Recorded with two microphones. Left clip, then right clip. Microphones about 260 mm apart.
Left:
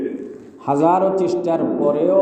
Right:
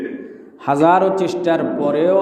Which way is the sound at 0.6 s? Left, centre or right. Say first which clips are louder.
Right 2 dB; right.